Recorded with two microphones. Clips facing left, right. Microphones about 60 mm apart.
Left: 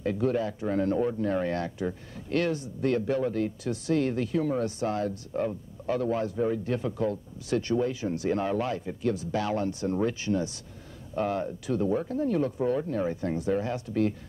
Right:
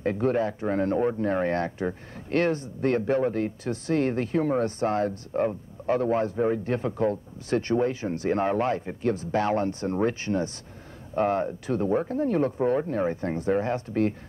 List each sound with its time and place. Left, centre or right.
0.0 s speech: right